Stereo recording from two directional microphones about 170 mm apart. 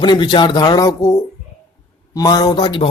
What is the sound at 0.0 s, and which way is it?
Speech, 25° left (ahead or behind).